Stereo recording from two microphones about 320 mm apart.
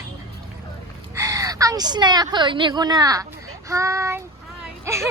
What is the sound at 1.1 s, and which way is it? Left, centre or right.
A woman's voice, centre.